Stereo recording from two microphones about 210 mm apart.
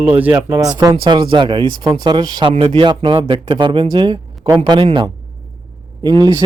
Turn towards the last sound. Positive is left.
turn(degrees=-20)  # may be behind; listen again after turning